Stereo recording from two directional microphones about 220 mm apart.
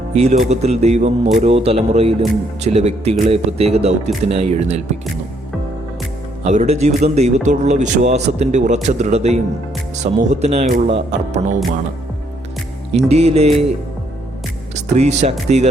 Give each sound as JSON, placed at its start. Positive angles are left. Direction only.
{"t": 0.1, "sound": "speech", "side_deg": -30}
{"t": 6.4, "sound": "a man's voice", "side_deg": -30}
{"t": 13.0, "sound": "speech", "side_deg": -30}
{"t": 14.9, "sound": "a man's voice", "side_deg": -30}